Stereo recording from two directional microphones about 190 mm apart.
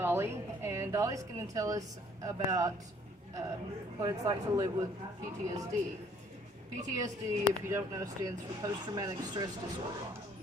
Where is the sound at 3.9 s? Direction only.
20° right (ahead or behind).